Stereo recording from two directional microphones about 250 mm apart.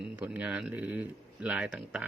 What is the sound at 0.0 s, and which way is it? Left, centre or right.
Speech, centre.